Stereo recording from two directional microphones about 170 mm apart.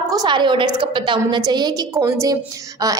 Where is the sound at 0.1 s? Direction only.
25° right (ahead or behind).